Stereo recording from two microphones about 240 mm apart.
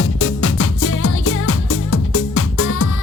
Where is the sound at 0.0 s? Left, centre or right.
Left.